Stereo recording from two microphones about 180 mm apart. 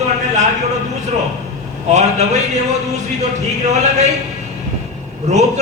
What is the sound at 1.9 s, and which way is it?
Speech, 40° right (ahead or behind).